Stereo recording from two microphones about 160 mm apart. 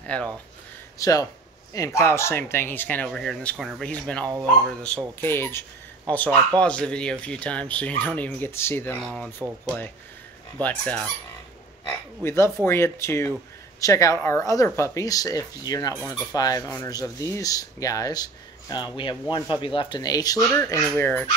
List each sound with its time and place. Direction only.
0.0 s speech: 10° left (ahead or behind)
0.9 s speech: 20° left (ahead or behind)
12.2 s speech: 15° left (ahead or behind)